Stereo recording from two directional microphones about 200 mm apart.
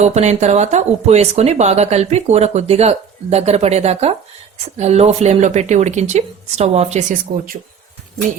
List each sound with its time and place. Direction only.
0.0 s speech: 35° right (ahead or behind)